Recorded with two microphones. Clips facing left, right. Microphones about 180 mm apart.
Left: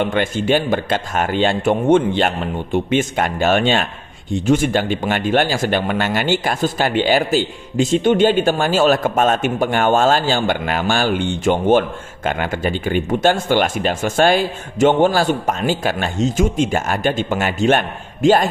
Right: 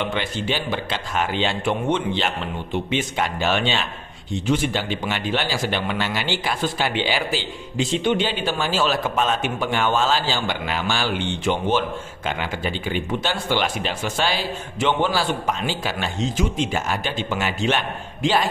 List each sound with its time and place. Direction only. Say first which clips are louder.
0.0 s speech: left 7 dB; 50° left (ahead or behind)